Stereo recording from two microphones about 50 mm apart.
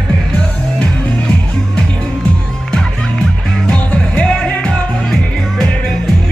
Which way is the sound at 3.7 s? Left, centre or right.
Centre.